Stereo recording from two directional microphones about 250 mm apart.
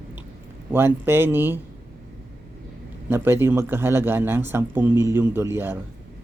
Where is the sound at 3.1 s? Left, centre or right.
Centre.